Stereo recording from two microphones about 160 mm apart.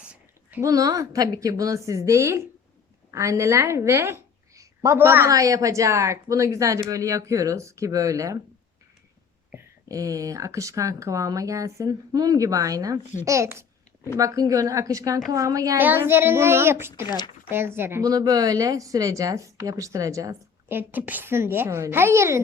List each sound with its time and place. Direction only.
0.0 s a sound: 5° right (ahead or behind)
0.6 s a woman's voice: 20° right (ahead or behind)
9.5 s a woman's voice: 20° right (ahead or behind)
17.1 s speech: 25° left (ahead or behind)
17.5 s a woman's voice: 15° right (ahead or behind)